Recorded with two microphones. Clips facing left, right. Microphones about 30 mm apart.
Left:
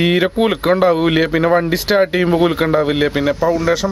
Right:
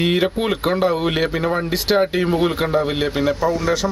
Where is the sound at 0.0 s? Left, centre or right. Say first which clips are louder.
Left 4 dB; left.